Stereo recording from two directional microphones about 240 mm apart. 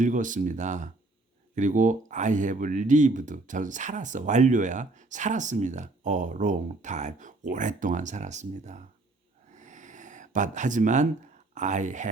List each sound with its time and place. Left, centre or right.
0.0 s speech: right
9.6 s a sound: right
11.5 s speech: right